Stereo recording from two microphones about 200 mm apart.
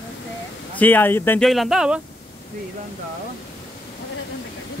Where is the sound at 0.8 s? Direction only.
10° left (ahead or behind).